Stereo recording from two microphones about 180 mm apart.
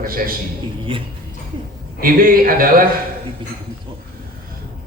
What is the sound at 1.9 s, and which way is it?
Speech, 50° right (ahead or behind).